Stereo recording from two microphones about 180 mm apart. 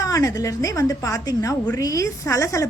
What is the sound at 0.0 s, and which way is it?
A woman's voice, 20° left (ahead or behind).